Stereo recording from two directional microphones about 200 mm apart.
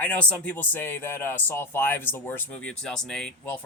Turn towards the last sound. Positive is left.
turn(degrees=5)  # may be behind; listen again after turning